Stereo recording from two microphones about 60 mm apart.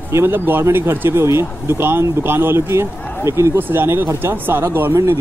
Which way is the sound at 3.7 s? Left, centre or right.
Right.